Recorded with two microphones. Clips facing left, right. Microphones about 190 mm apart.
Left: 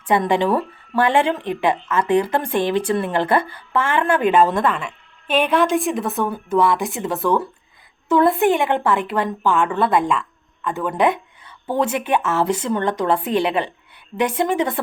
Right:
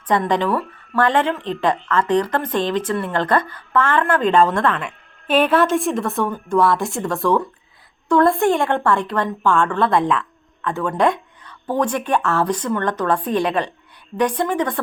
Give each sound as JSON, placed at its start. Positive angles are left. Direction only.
{"t": 0.1, "sound": "a woman's voice", "side_deg": 10}
{"t": 12.1, "sound": "speech", "side_deg": 20}
{"t": 12.8, "sound": "speech", "side_deg": 10}